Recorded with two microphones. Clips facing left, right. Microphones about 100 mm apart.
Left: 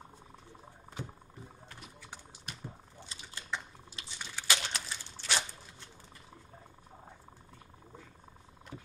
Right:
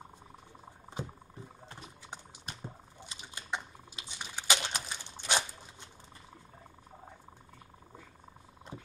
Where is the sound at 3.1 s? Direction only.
20° right (ahead or behind).